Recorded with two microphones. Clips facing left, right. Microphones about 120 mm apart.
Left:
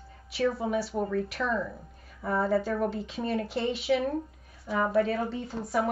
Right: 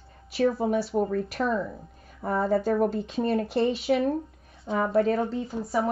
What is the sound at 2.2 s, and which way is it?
Speech, 30° right (ahead or behind).